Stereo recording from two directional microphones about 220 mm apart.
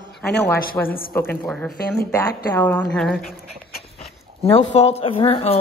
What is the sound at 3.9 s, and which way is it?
Speech, 30° left (ahead or behind).